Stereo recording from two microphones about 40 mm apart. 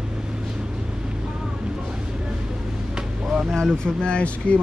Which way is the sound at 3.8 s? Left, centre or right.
Left.